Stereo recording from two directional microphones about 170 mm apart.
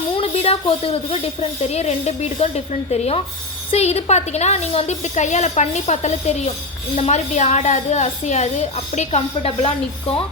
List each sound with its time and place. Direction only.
0.1 s a woman's voice: 35° left (ahead or behind)